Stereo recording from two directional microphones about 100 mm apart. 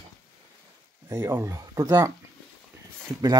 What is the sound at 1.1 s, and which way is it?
Speech, 35° right (ahead or behind).